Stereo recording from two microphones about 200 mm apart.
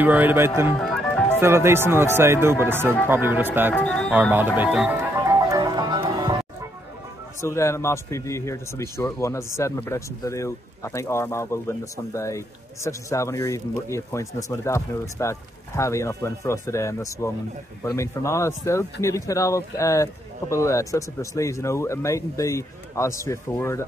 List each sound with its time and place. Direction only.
0.0 s speech: 10° right (ahead or behind)
0.7 s music: centre (ahead or behind)
1.3 s speech: 10° right (ahead or behind)
3.7 s speech: 5° left (ahead or behind)
4.1 s speech: 10° right (ahead or behind)
5.2 s music: 15° right (ahead or behind)
7.4 s speech: 15° left (ahead or behind)